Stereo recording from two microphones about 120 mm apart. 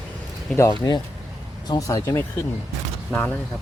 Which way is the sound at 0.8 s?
30° left (ahead or behind).